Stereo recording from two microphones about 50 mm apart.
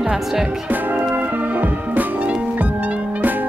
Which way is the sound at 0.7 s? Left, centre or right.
Right.